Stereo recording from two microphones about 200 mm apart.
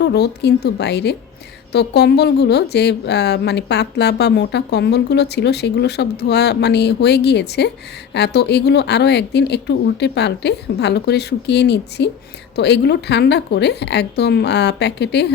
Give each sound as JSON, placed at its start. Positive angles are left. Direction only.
{"t": 0.0, "sound": "speech", "side_deg": 55}